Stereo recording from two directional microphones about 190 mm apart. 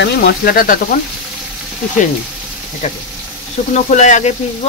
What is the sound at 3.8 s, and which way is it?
Speech, 40° left (ahead or behind).